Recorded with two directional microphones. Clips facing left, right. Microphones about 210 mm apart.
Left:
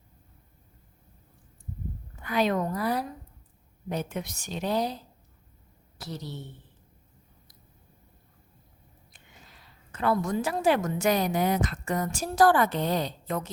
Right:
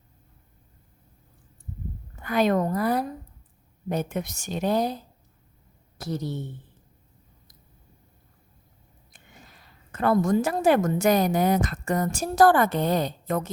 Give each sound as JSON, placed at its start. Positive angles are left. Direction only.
{"t": 2.2, "sound": "a woman's voice", "side_deg": -50}
{"t": 6.0, "sound": "a woman's voice", "side_deg": -50}
{"t": 9.9, "sound": "a woman's voice", "side_deg": -50}